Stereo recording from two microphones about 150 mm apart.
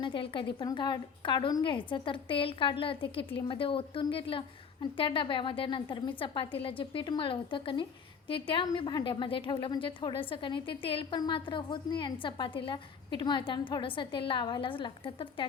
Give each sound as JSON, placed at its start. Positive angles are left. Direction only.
{"t": 0.0, "sound": "a woman's voice", "side_deg": 35}